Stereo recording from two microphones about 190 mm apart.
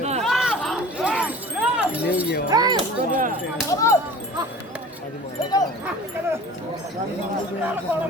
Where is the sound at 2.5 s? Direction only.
20° right (ahead or behind).